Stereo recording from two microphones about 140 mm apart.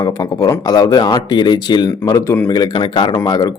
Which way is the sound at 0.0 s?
25° left (ahead or behind).